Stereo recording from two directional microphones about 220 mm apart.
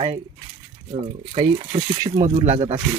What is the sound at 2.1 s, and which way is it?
Speech, 30° right (ahead or behind).